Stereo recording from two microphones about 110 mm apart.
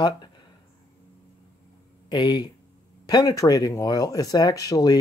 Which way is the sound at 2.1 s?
40° left (ahead or behind).